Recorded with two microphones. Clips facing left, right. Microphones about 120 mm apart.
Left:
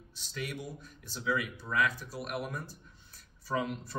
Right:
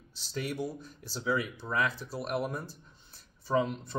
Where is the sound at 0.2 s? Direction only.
35° right (ahead or behind).